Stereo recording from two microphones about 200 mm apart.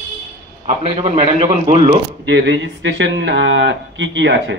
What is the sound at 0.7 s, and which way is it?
A man's voice, 30° right (ahead or behind).